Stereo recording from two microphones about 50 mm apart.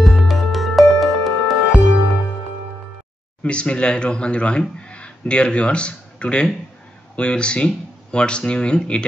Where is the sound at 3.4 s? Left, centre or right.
Left.